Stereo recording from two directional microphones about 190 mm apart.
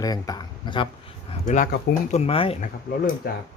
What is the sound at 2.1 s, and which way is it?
Speech, 35° left (ahead or behind).